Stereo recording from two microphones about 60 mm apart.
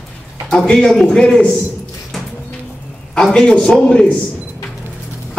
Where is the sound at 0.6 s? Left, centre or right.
Centre.